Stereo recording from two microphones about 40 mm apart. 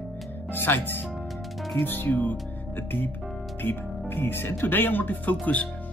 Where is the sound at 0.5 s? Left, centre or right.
Left.